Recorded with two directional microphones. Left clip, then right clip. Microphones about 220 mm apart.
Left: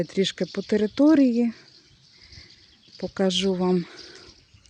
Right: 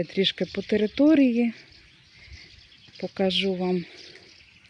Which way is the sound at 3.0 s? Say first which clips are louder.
Left 1 dB; 10° left (ahead or behind).